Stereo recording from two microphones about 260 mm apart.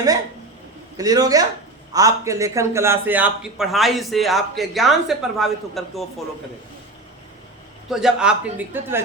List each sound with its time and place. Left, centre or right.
0.9 s a man's voice: centre
7.9 s a man's voice: centre